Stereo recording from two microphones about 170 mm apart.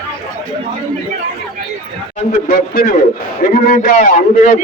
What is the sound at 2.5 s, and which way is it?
A man's voice, 55° left (ahead or behind).